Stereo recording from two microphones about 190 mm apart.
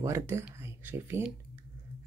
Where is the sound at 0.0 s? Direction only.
15° right (ahead or behind).